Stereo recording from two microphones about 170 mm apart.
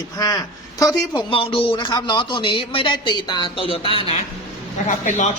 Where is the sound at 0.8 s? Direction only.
25° left (ahead or behind).